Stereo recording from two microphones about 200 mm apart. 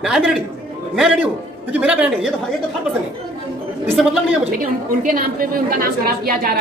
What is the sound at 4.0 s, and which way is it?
Speech, centre (ahead or behind).